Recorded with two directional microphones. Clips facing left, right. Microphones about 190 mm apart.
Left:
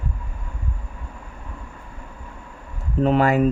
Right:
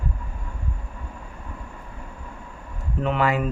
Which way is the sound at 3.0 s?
40° left (ahead or behind).